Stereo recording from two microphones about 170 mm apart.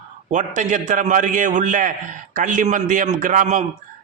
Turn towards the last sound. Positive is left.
turn(degrees=-50)  # may be behind; listen again after turning